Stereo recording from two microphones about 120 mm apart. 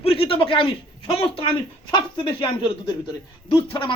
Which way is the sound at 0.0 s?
50° left (ahead or behind).